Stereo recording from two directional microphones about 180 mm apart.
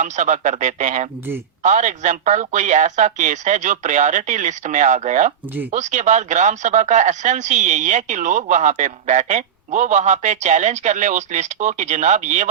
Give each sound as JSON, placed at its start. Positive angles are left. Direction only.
{"t": 0.0, "sound": "speech", "side_deg": -45}